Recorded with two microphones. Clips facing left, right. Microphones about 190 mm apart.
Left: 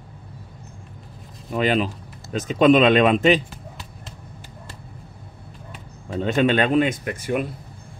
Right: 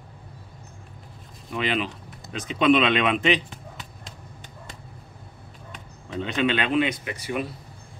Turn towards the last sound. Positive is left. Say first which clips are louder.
# left 5 dB
turn(degrees=50)  # may be behind; listen again after turning